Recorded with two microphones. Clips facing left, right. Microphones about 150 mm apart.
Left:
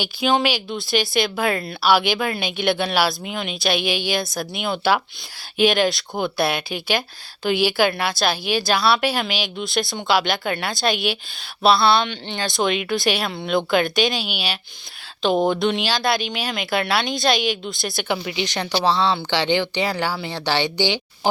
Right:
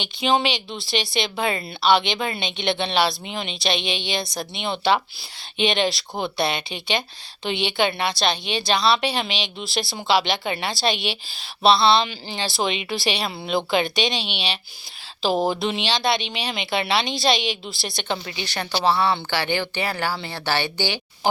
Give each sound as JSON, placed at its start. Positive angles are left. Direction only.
{"t": 0.0, "sound": "speech", "side_deg": 0}
{"t": 18.3, "sound": "a woman's voice", "side_deg": 20}